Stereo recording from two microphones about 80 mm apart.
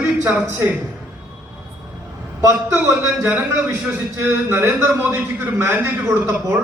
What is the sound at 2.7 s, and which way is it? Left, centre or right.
A man's voice, right.